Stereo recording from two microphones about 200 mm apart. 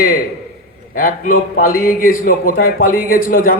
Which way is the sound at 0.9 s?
45° left (ahead or behind).